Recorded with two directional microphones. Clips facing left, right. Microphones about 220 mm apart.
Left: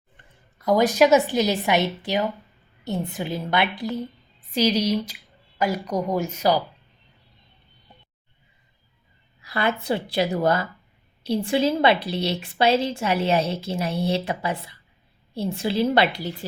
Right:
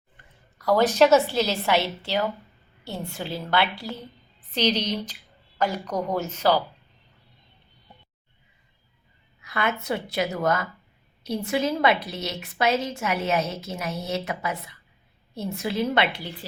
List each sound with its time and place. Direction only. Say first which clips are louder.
0.6 s a woman's voice: left 1 dB; 15° left (ahead or behind)
9.4 s a woman's voice: left 3 dB; 35° left (ahead or behind)